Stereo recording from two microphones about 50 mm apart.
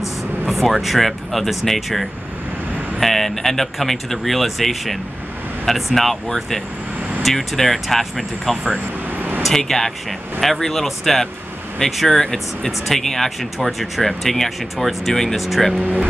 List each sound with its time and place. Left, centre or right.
0.5 s speech: centre
9.1 s vehicle: right
9.4 s speech: centre
15.8 s speech: right